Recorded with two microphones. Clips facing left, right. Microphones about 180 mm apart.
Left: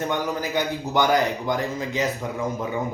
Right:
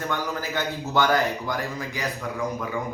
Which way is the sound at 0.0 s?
20° left (ahead or behind).